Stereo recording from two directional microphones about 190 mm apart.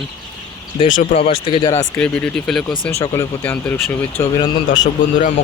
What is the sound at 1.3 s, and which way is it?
Speech, 25° left (ahead or behind).